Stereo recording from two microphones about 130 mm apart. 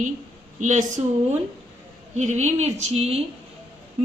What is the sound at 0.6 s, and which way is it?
A woman's voice, 70° right (ahead or behind).